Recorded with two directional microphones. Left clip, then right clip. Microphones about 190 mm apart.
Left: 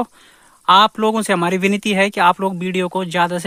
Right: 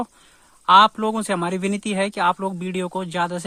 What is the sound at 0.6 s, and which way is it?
A man's voice, 20° left (ahead or behind).